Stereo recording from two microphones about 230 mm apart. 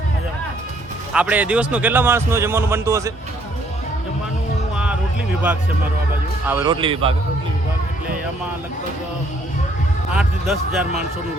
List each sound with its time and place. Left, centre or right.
1.1 s speech: centre
6.5 s speech: centre
10.2 s speech: centre